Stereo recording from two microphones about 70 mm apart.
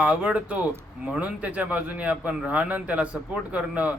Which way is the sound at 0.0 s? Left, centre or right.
Centre.